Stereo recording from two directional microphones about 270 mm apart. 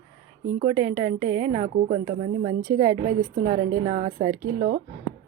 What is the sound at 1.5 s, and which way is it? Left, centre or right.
A woman's voice, right.